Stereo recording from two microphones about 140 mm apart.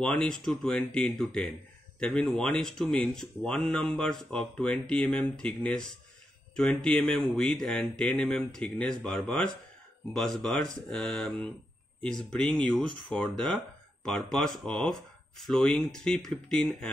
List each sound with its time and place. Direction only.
0.0 s speech: 5° left (ahead or behind)